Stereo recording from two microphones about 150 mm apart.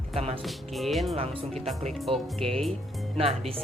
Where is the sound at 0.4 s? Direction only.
Centre (ahead or behind).